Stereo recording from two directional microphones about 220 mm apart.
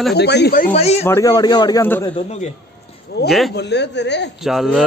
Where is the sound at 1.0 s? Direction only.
15° left (ahead or behind).